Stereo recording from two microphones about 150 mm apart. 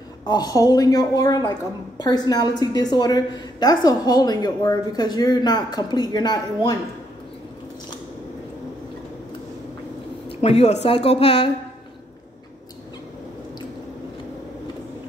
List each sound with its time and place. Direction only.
0.2 s a woman's voice: 25° left (ahead or behind)
10.4 s speech: 45° left (ahead or behind)